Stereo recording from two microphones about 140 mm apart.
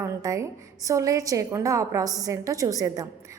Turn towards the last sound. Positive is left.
turn(degrees=-25)  # may be behind; listen again after turning